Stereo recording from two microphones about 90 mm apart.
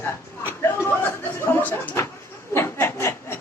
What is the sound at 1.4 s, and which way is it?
Speech, 25° left (ahead or behind).